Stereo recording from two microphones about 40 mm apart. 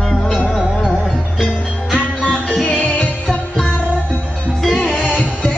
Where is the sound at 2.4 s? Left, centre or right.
Right.